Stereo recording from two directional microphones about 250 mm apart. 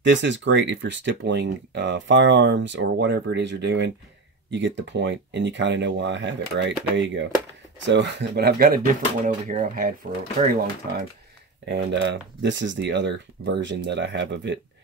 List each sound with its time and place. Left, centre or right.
0.1 s speech: right
11.6 s speech: right